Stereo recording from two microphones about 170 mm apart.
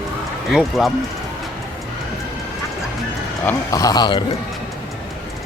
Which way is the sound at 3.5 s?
20° left (ahead or behind).